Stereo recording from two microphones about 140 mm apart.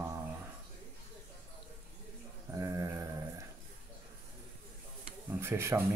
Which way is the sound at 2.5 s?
20° right (ahead or behind).